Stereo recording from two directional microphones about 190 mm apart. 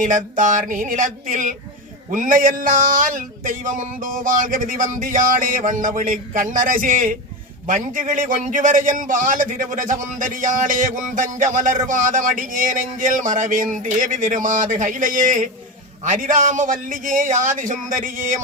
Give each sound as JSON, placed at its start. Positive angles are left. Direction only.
{"t": 0.0, "sound": "a man's voice", "side_deg": -45}